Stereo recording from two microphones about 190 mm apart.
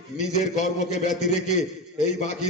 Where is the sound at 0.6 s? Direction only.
40° left (ahead or behind).